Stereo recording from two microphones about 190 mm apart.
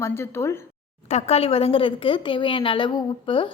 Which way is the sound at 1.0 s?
35° left (ahead or behind).